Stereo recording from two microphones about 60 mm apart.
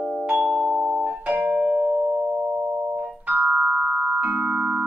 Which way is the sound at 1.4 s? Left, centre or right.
Centre.